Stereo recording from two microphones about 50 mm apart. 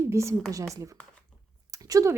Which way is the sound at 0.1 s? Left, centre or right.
Right.